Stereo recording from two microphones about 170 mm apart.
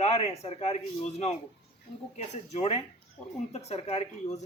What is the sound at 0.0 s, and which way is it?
Speech, 35° left (ahead or behind).